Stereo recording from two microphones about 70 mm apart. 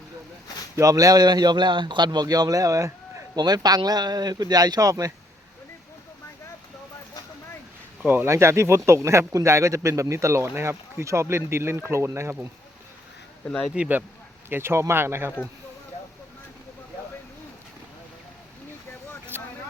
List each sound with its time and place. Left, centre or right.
0.8 s a man's voice: right
3.3 s speech: right
8.0 s speech: right
8.3 s speech: right
13.7 s speech: right
14.5 s speech: right
19.3 s vehicle: right